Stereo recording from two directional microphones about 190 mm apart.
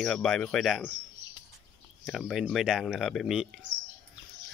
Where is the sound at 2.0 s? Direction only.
Centre (ahead or behind).